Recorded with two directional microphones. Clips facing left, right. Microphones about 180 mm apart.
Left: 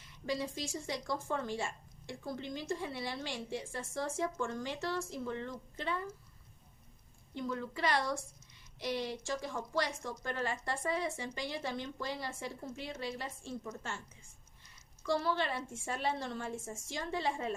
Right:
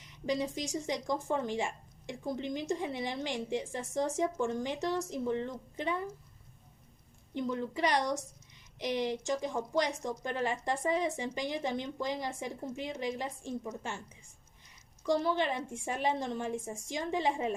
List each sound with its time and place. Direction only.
0.0 s speech: 20° right (ahead or behind)
7.3 s a woman's voice: 20° right (ahead or behind)
15.0 s speech: 15° right (ahead or behind)